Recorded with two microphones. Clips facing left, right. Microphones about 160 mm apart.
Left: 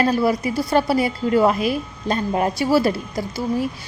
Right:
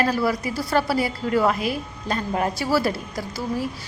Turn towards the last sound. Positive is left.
turn(degrees=20)  # may be behind; listen again after turning